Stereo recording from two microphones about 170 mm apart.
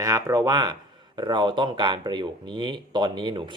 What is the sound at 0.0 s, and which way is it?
Speech, 20° right (ahead or behind).